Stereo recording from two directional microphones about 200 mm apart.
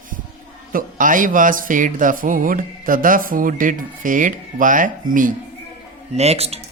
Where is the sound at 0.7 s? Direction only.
45° right (ahead or behind).